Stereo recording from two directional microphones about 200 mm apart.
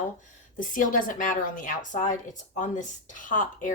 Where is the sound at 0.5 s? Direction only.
40° left (ahead or behind).